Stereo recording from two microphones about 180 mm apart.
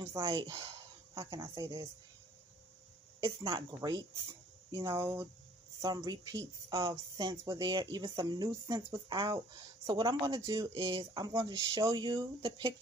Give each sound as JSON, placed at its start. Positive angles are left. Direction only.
{"t": 0.0, "sound": "speech", "side_deg": -20}
{"t": 3.2, "sound": "speech", "side_deg": -20}